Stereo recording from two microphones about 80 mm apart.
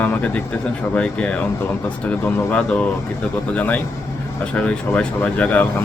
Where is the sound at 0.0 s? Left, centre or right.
Centre.